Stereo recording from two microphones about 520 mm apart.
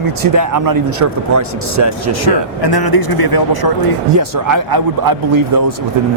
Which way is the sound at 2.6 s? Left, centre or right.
Left.